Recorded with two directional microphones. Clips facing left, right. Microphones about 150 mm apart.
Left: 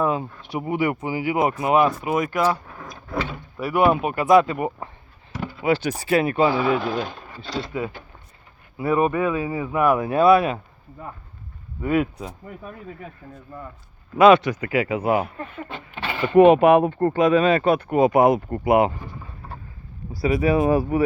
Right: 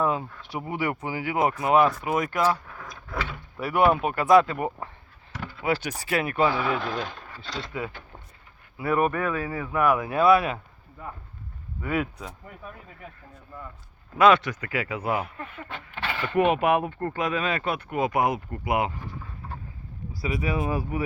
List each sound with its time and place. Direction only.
0.0 s speech: 20° left (ahead or behind)
2.3 s vehicle: 15° left (ahead or behind)
3.7 s speech: 10° left (ahead or behind)
5.3 s a sound: 15° left (ahead or behind)
5.7 s speech: 30° left (ahead or behind)
6.7 s speech: 10° left (ahead or behind); by 11.1 s 30° left (ahead or behind)
11.9 s speech: 20° left (ahead or behind)
14.2 s speech: 10° left (ahead or behind)
15.1 s speech: 30° left (ahead or behind)
15.6 s speech: 15° left (ahead or behind)
16.4 s speech: 30° left (ahead or behind)
18.0 s speech: 30° left (ahead or behind)
18.3 s speech: 50° left (ahead or behind)
20.5 s speech: 60° left (ahead or behind)